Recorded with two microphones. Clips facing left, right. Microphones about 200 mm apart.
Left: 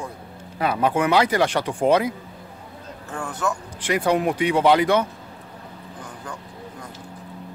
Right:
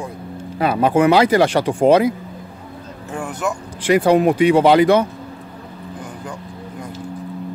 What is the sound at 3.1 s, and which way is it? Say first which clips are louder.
Speech: right 3 dB; 15° right (ahead or behind).